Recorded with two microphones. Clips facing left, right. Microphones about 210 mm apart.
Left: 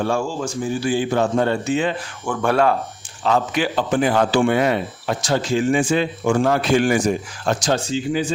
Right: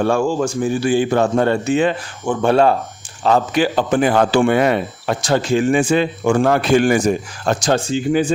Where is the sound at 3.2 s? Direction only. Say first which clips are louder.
Right 4 dB; 40° right (ahead or behind).